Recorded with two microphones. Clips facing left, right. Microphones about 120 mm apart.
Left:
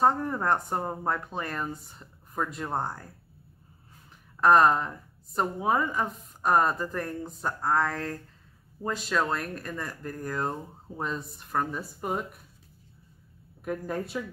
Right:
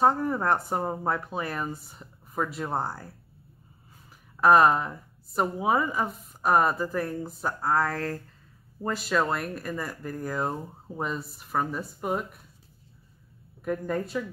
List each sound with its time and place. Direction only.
0.0 s a woman's voice: 5° right (ahead or behind)
4.4 s a woman's voice: 5° right (ahead or behind)
13.7 s a woman's voice: 5° left (ahead or behind)